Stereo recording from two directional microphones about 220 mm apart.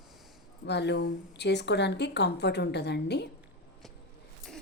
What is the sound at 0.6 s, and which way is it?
Speech, 50° left (ahead or behind).